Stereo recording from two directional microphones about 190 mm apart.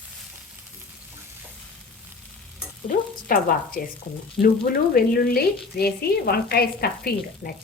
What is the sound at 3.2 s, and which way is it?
A woman's voice, 50° left (ahead or behind).